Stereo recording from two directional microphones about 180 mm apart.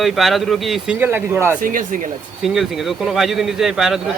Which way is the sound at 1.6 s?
50° right (ahead or behind).